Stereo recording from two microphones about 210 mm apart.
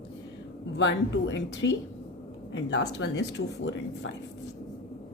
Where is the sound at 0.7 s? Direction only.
60° left (ahead or behind).